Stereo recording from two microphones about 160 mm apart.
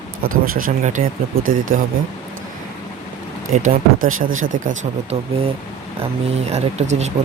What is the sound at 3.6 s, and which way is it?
Speech, 60° right (ahead or behind).